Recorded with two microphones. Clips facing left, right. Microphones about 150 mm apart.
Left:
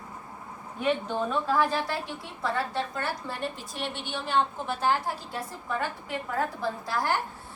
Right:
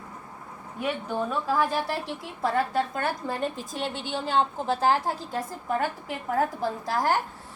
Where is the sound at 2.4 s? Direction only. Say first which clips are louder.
Right 4 dB; 50° right (ahead or behind).